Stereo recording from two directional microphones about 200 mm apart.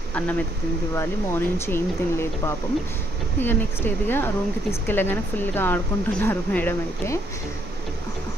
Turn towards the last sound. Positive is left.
turn(degrees=10)  # may be behind; listen again after turning